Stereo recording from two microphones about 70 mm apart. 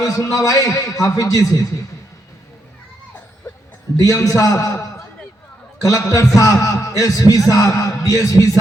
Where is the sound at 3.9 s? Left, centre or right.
Left.